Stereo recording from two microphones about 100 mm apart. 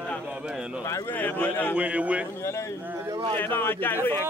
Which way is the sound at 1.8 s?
15° right (ahead or behind).